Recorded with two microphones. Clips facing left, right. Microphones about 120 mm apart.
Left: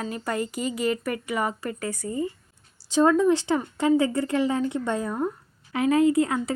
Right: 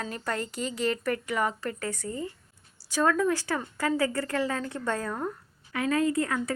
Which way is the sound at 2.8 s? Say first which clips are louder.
Left 6 dB; 25° left (ahead or behind).